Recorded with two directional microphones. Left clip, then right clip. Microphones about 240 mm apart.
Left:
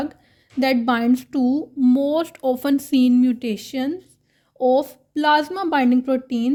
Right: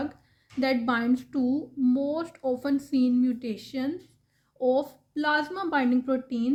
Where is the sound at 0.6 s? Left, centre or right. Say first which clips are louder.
Left 7 dB; left.